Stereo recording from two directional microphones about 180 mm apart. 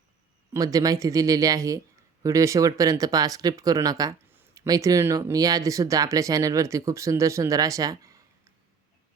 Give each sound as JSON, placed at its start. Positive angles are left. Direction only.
{"t": 0.5, "sound": "speech", "side_deg": -20}